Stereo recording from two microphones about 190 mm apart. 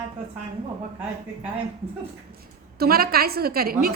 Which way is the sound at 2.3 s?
55° right (ahead or behind).